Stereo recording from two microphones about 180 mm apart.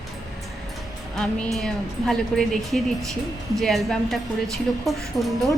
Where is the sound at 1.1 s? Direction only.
Centre (ahead or behind).